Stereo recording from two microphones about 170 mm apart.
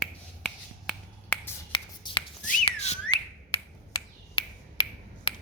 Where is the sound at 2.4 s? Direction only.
40° left (ahead or behind).